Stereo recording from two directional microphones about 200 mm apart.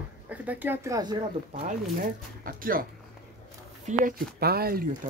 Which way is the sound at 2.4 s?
45° right (ahead or behind).